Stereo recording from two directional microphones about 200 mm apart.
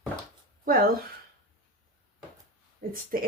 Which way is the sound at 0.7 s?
45° right (ahead or behind).